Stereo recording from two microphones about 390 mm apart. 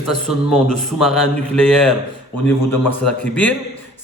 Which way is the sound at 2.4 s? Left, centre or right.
Centre.